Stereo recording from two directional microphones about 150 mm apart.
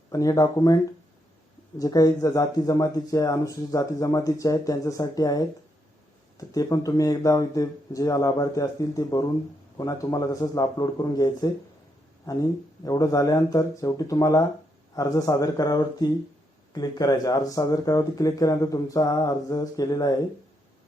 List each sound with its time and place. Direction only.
0.1 s speech: 20° left (ahead or behind)
1.8 s speech: 25° left (ahead or behind)